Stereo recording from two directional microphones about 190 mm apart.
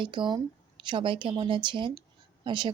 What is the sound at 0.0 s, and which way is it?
A woman's voice, 25° right (ahead or behind).